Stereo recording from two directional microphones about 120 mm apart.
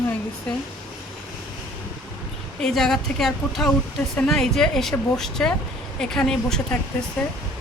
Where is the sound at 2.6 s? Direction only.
5° left (ahead or behind).